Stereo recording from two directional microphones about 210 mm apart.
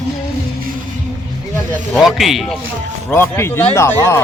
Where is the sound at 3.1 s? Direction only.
10° left (ahead or behind).